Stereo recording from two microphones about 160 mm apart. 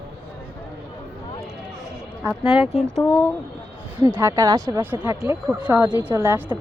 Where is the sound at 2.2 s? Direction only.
5° right (ahead or behind).